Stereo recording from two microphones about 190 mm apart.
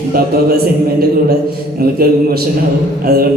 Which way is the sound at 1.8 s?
55° right (ahead or behind).